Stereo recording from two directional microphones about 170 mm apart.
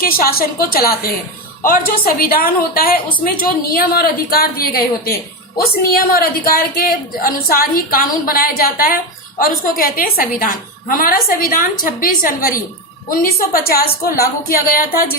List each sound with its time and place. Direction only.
0.0 s a woman's voice: 60° left (ahead or behind)